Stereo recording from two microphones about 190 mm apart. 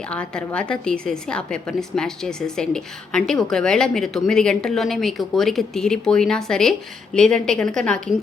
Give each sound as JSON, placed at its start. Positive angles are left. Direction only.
{"t": 0.1, "sound": "speech", "side_deg": 5}